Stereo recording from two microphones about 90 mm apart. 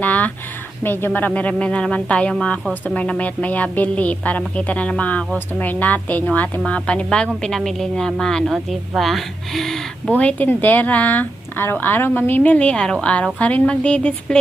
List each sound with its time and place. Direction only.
0.0 s a sound: 15° left (ahead or behind)
0.8 s speech: 25° left (ahead or behind); by 9.8 s 5° left (ahead or behind)
10.1 s speech: 15° left (ahead or behind)